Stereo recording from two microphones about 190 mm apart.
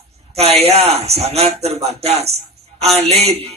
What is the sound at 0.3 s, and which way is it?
A man's voice, 35° right (ahead or behind).